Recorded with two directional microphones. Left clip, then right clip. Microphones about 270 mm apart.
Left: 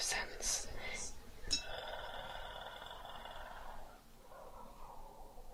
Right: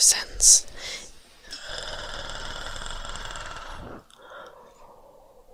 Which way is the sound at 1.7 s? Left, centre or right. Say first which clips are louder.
Right 10 dB; right.